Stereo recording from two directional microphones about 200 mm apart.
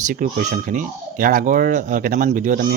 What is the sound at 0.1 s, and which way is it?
Speech, 40° right (ahead or behind).